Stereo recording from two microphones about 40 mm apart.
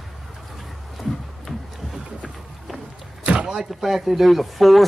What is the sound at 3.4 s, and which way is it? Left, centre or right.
Speech, centre.